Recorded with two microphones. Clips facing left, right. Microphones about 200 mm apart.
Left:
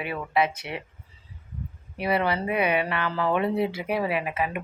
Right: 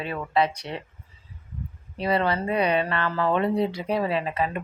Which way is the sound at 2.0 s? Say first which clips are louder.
Right 1 dB; 10° left (ahead or behind).